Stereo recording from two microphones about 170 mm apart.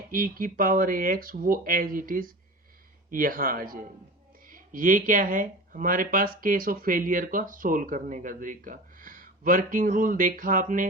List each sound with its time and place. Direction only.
0.1 s speech: 55° right (ahead or behind)